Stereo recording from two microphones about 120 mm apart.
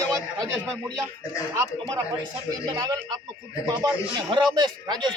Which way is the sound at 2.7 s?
35° right (ahead or behind).